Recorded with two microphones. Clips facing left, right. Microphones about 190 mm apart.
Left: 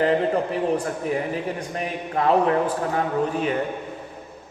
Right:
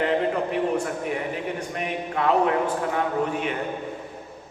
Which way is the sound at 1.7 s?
35° left (ahead or behind).